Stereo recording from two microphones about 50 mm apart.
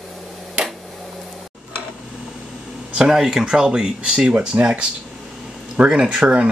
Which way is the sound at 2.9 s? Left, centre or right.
Centre.